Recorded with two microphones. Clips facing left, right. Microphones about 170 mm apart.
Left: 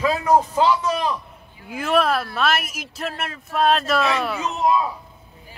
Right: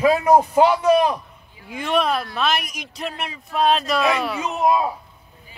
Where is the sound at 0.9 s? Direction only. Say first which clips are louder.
Right 7 dB; 55° right (ahead or behind).